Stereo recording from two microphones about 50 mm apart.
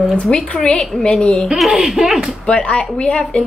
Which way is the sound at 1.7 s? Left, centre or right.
Centre.